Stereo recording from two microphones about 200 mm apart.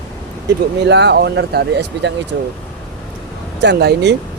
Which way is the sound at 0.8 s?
60° right (ahead or behind).